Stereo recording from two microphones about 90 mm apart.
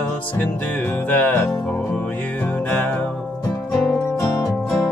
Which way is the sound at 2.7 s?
20° left (ahead or behind).